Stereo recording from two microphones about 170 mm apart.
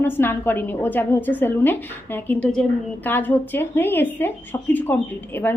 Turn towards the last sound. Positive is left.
turn(degrees=10)  # may be behind; listen again after turning